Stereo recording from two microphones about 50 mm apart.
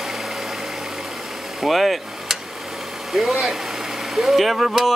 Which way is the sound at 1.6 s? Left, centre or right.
Centre.